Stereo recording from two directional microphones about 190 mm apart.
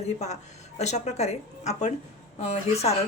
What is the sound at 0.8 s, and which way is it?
Speech, 35° left (ahead or behind).